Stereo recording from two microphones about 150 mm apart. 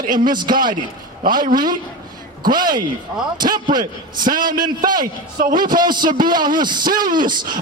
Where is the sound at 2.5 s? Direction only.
30° right (ahead or behind).